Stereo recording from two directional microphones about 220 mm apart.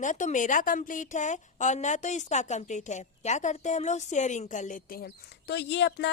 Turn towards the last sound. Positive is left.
turn(degrees=50)  # may be behind; listen again after turning